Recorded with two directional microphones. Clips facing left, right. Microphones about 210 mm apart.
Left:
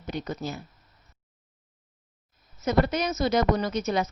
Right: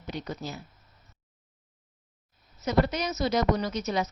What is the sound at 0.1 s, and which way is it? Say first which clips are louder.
Speech: left 3 dB; 50° left (ahead or behind).